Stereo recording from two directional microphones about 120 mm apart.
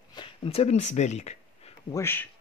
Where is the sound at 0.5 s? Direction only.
65° left (ahead or behind).